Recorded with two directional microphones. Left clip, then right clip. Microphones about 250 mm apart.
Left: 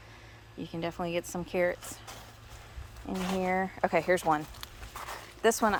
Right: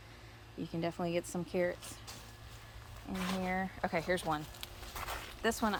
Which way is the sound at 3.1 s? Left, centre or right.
Left.